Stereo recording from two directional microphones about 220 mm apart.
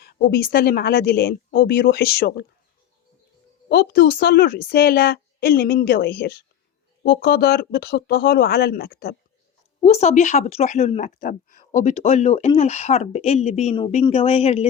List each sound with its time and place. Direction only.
0.0 s a woman's voice: 45° left (ahead or behind)
3.7 s a woman's voice: 45° left (ahead or behind)
9.8 s speech: 30° left (ahead or behind)